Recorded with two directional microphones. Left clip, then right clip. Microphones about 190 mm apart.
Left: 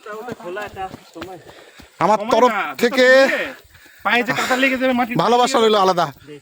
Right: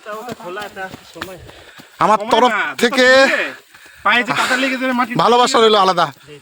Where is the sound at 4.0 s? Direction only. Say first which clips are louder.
Right 3 dB; 15° right (ahead or behind).